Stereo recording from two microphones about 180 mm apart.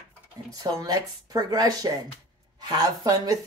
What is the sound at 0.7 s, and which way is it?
Speech, 20° right (ahead or behind).